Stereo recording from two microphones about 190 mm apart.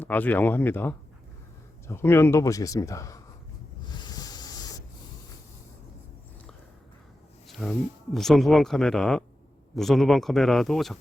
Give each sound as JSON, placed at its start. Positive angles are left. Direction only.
{"t": 0.0, "sound": "speech", "side_deg": 10}
{"t": 3.9, "sound": "wind noise", "side_deg": 20}
{"t": 7.6, "sound": "speech", "side_deg": 5}